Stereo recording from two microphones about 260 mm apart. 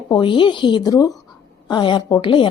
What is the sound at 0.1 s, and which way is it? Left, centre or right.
A woman's voice, centre.